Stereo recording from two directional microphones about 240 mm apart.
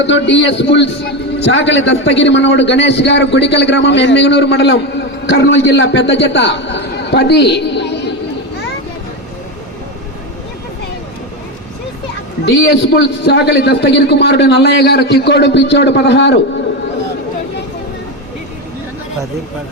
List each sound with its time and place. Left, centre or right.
0.0 s a man's voice: left
12.5 s a man's voice: left